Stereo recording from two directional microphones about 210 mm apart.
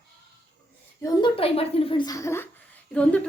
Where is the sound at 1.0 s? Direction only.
25° left (ahead or behind).